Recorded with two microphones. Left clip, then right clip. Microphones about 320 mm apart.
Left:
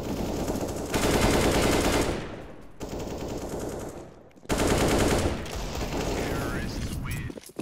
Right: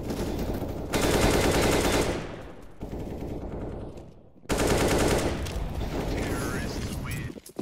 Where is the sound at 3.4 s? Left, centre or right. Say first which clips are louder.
Left 4 dB; left.